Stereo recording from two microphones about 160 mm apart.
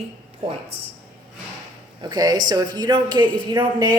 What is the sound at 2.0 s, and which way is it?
A woman's voice, 25° right (ahead or behind).